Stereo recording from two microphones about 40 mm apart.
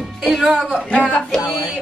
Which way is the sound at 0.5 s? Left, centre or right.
Centre.